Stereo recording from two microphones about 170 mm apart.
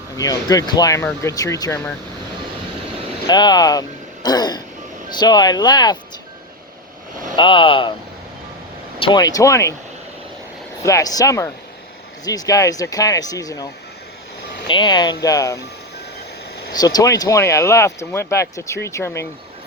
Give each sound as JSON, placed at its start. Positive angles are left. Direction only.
{"t": 0.2, "sound": "speech", "side_deg": 20}
{"t": 3.2, "sound": "a sound", "side_deg": 25}
{"t": 5.1, "sound": "speech", "side_deg": 25}
{"t": 7.3, "sound": "speech", "side_deg": 30}
{"t": 9.0, "sound": "speech", "side_deg": 25}
{"t": 10.8, "sound": "speech", "side_deg": 20}
{"t": 14.7, "sound": "speech", "side_deg": 25}
{"t": 16.7, "sound": "speech", "side_deg": 20}